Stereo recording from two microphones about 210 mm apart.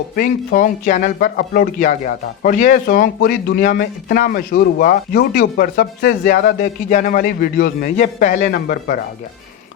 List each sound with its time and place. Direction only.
0.2 s speech: 45° left (ahead or behind)